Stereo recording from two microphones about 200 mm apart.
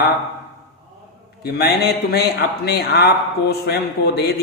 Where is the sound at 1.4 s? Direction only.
55° left (ahead or behind).